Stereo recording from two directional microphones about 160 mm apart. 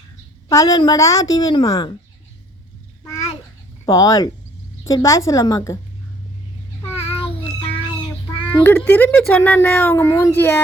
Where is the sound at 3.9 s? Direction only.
20° left (ahead or behind).